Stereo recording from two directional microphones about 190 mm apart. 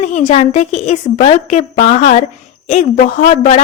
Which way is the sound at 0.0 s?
40° left (ahead or behind).